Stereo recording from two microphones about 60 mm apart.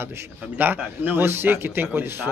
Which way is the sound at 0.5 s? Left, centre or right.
Right.